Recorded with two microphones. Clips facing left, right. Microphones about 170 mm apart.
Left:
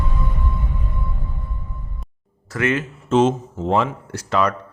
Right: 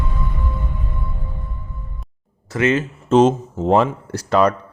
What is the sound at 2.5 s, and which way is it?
Speech, 25° right (ahead or behind).